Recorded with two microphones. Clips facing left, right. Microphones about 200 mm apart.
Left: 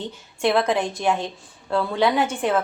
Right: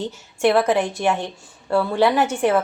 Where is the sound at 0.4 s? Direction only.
10° right (ahead or behind).